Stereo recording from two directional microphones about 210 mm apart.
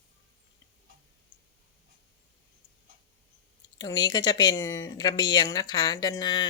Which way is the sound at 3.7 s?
20° left (ahead or behind).